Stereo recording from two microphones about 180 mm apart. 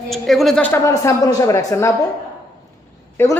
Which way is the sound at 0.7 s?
15° left (ahead or behind).